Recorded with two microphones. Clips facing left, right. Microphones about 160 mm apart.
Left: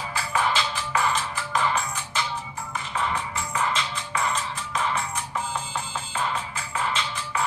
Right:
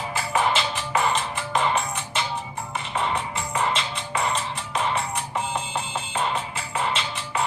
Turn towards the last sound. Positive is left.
turn(degrees=-25)  # may be behind; listen again after turning